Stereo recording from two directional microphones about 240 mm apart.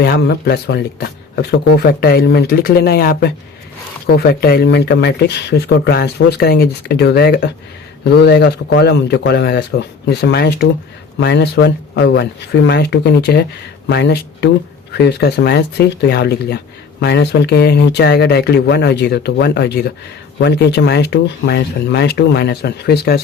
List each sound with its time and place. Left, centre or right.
0.0 s speech: left